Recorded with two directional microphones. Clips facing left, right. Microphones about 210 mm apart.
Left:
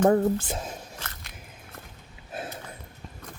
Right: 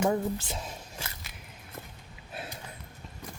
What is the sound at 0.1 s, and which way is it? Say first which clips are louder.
Speech: left 7 dB; 50° left (ahead or behind).